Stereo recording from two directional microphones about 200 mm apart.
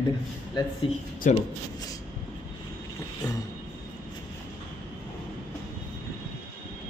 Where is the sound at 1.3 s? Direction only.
40° left (ahead or behind).